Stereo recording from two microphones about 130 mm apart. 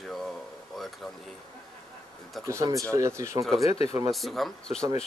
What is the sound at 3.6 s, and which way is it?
Speech, 50° left (ahead or behind).